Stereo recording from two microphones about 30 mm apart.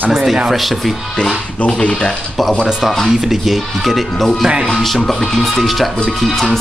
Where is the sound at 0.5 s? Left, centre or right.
Centre.